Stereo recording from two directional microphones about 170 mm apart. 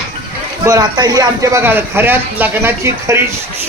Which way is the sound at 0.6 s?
25° right (ahead or behind).